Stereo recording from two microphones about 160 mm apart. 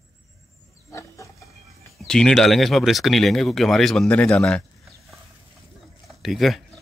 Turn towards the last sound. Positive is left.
turn(degrees=0)  # may be behind; listen again after turning